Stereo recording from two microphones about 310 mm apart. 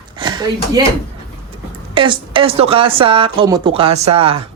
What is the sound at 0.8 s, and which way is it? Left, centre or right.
Speech, centre.